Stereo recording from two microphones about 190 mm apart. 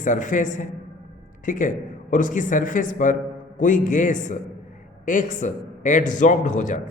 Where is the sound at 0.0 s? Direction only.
40° left (ahead or behind).